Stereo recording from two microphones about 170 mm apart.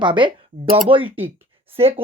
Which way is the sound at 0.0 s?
30° right (ahead or behind).